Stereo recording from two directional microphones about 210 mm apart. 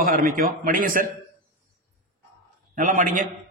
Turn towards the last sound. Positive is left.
turn(degrees=-40)  # may be behind; listen again after turning